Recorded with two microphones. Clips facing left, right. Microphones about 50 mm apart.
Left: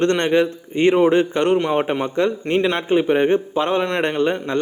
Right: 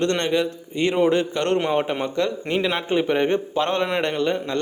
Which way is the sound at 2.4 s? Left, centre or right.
Centre.